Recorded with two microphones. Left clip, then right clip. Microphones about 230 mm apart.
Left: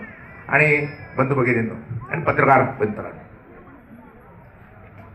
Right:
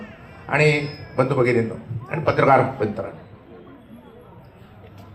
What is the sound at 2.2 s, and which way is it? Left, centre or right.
Speech, right.